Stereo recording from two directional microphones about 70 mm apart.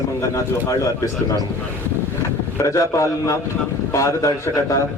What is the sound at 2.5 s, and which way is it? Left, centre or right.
A man's voice, left.